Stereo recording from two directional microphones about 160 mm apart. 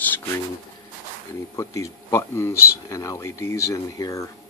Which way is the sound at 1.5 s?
20° left (ahead or behind).